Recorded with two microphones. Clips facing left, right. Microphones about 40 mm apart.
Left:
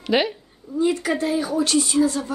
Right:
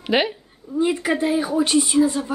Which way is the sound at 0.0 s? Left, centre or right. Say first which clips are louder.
Even; centre.